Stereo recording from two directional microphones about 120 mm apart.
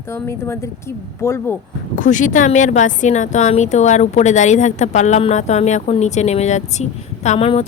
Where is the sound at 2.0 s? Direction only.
90° left.